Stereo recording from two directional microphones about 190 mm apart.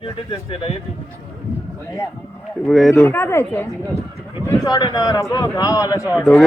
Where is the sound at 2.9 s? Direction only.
10° left (ahead or behind).